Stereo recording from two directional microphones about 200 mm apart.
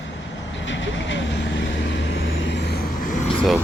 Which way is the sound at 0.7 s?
65° left (ahead or behind).